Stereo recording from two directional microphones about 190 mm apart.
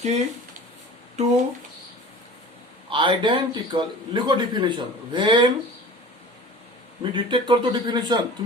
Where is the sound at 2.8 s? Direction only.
25° right (ahead or behind).